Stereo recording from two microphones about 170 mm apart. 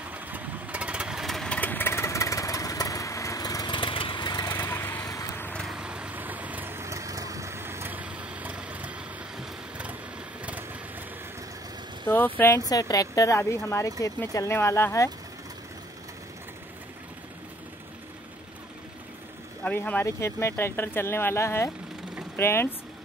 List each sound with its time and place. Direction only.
0.1 s vehicle: 10° right (ahead or behind)
12.4 s speech: 15° left (ahead or behind)
19.6 s speech: 10° left (ahead or behind)